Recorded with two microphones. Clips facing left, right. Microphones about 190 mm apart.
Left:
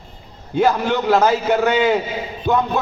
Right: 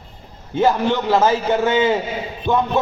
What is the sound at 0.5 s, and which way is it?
A man's voice, 20° right (ahead or behind).